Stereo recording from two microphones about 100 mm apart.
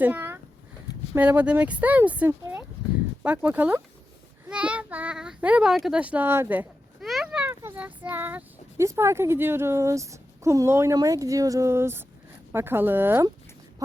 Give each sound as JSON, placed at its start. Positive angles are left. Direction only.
{"t": 0.0, "sound": "speech", "side_deg": -20}
{"t": 5.7, "sound": "speech", "side_deg": 0}
{"t": 6.0, "sound": "speech", "side_deg": -15}
{"t": 7.0, "sound": "a sound", "side_deg": -5}
{"t": 7.5, "sound": "child singing", "side_deg": -25}
{"t": 7.8, "sound": "speech", "side_deg": -15}
{"t": 8.8, "sound": "a woman's voice", "side_deg": -30}